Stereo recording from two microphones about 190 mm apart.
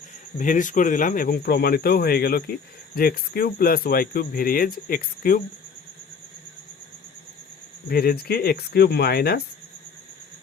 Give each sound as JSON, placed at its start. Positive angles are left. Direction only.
{"t": 0.3, "sound": "speech", "side_deg": 40}
{"t": 7.9, "sound": "speech", "side_deg": 55}